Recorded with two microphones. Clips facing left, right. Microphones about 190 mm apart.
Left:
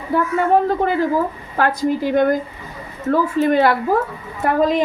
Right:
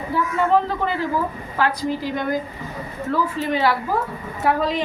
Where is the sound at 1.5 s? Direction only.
50° left (ahead or behind).